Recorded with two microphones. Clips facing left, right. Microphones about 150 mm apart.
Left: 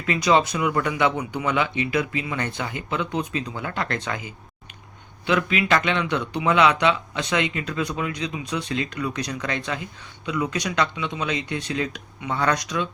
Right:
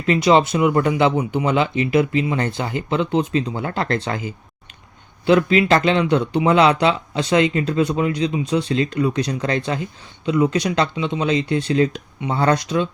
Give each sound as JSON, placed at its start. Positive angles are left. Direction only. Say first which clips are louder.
{"t": 0.0, "sound": "speech", "louder": "right 5 dB", "side_deg": -30}